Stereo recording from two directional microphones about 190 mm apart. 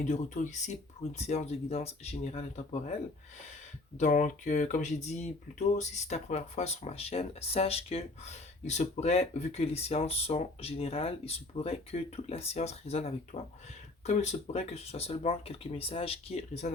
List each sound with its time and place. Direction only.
0.0 s speech: 40° left (ahead or behind)